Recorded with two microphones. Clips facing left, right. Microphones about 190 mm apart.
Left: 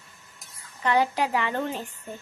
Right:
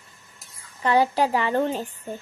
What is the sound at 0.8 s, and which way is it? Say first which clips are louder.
Speech: right 3 dB; 35° right (ahead or behind).